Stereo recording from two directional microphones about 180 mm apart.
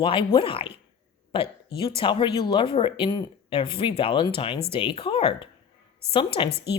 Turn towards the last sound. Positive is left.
turn(degrees=30)  # may be behind; listen again after turning